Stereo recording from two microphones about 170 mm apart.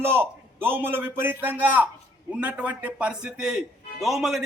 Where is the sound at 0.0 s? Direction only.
15° right (ahead or behind).